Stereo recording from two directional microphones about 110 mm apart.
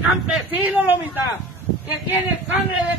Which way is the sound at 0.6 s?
15° right (ahead or behind).